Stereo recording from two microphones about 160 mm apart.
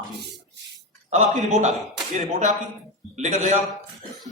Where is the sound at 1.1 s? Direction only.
45° right (ahead or behind).